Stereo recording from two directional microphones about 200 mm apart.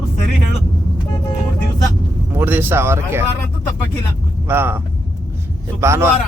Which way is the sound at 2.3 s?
10° right (ahead or behind).